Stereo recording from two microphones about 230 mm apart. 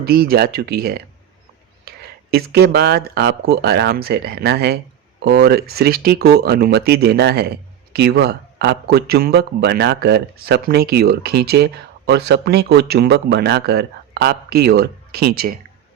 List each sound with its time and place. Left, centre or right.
0.0 s speech: right
1.9 s a sound: right
2.3 s speech: right